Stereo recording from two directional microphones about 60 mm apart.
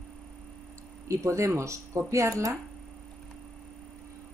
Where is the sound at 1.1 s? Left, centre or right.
Right.